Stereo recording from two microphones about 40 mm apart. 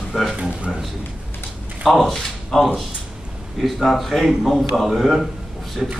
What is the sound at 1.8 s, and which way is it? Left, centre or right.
Speech, centre.